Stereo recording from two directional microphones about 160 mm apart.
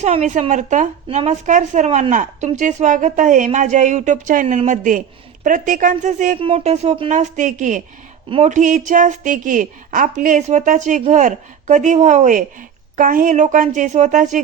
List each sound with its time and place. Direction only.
0.0 s a woman's voice: 45° right (ahead or behind)
7.1 s a woman's voice: 50° right (ahead or behind)